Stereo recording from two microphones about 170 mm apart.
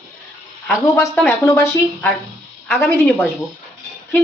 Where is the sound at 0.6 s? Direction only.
15° left (ahead or behind).